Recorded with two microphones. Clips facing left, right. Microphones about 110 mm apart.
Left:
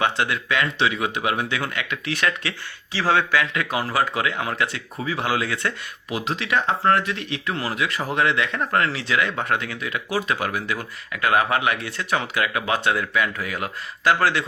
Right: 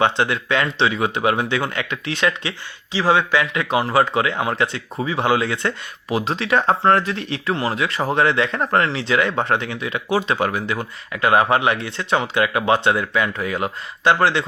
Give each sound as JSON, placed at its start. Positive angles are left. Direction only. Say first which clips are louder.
{"t": 0.0, "sound": "a man's voice", "louder": "right 4 dB", "side_deg": -30}